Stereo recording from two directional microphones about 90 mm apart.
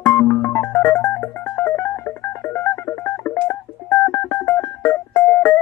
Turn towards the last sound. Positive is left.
turn(degrees=25)  # may be behind; listen again after turning